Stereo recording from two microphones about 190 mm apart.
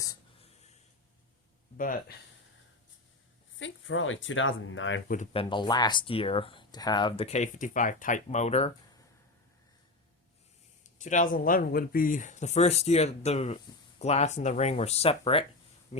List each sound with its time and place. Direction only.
1.8 s speech: 45° left (ahead or behind)
3.6 s speech: 90° left
5.0 s speech: 40° left (ahead or behind)
5.3 s speech: 25° left (ahead or behind)
10.8 s speech: 40° left (ahead or behind)